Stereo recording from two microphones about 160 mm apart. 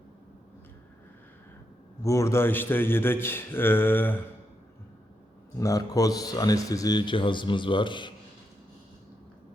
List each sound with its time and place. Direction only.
2.0 s speech: 20° left (ahead or behind)
5.5 s speech: 20° left (ahead or behind)